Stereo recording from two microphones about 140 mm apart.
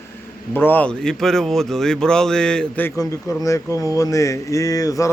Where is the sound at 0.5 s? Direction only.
15° left (ahead or behind).